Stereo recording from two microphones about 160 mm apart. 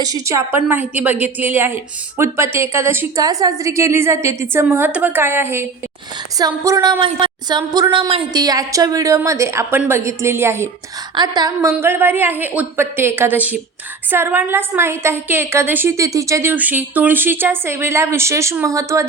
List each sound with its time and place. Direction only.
0.0 s a woman's voice: 20° right (ahead or behind)
6.7 s a woman's voice: 20° right (ahead or behind)
7.0 s a woman's voice: 30° right (ahead or behind)
11.1 s a woman's voice: 25° right (ahead or behind)
11.7 s a woman's voice: 15° right (ahead or behind)